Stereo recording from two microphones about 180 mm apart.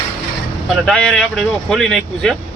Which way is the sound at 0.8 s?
5° left (ahead or behind).